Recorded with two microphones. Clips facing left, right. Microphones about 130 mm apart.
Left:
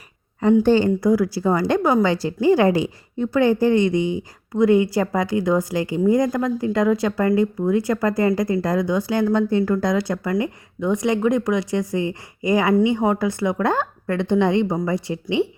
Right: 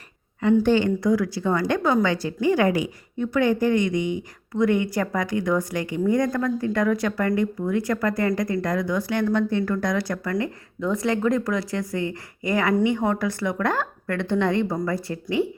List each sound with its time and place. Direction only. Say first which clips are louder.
0.6 s a woman's voice: left 3 dB; 35° left (ahead or behind)